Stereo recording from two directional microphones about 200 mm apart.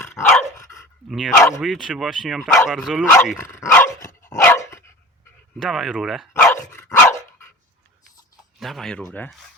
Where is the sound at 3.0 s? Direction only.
10° left (ahead or behind).